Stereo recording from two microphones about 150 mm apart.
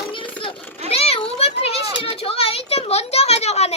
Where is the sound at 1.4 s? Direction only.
40° left (ahead or behind).